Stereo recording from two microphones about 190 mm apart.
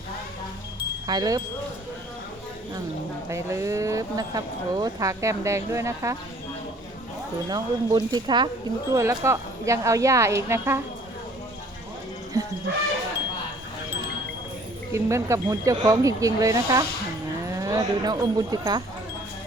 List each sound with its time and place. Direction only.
1.0 s speech: 20° right (ahead or behind)
3.2 s speech: 15° right (ahead or behind)
7.5 s speech: 20° right (ahead or behind)
14.9 s speech: 15° right (ahead or behind)